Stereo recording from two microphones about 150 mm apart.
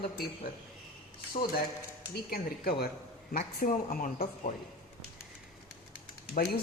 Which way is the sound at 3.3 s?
60° left (ahead or behind).